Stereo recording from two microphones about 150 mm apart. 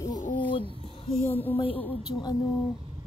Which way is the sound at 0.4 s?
35° left (ahead or behind).